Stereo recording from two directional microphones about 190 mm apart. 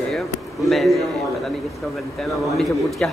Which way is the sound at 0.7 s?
Centre (ahead or behind).